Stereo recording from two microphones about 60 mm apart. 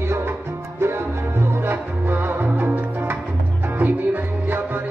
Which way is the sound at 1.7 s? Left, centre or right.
Right.